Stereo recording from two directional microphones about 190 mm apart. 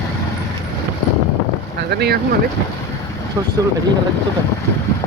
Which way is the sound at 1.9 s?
60° right (ahead or behind).